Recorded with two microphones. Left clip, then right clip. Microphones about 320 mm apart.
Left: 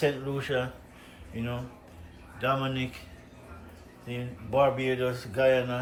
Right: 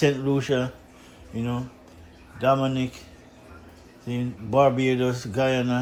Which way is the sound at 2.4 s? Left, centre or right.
Centre.